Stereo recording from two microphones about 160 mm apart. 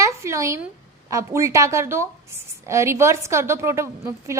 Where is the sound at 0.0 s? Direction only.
15° right (ahead or behind).